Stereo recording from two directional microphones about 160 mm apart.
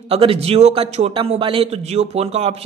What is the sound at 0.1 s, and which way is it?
A man's voice, 35° right (ahead or behind).